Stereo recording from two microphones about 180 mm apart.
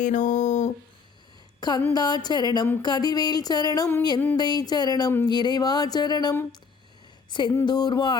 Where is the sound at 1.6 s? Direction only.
25° left (ahead or behind).